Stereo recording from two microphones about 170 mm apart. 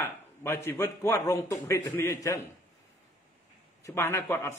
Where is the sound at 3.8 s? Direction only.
15° left (ahead or behind).